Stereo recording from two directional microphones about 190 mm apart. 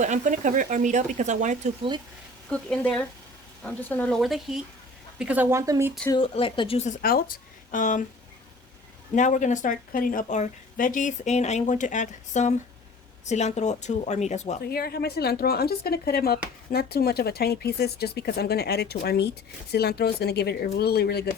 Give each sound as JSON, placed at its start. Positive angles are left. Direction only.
{"t": 0.0, "sound": "speech", "side_deg": -40}
{"t": 2.5, "sound": "speech", "side_deg": 5}
{"t": 6.1, "sound": "speech", "side_deg": 30}
{"t": 9.1, "sound": "speech", "side_deg": 40}
{"t": 14.6, "sound": "speech", "side_deg": 55}